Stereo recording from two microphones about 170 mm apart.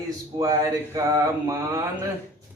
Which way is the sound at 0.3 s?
30° right (ahead or behind).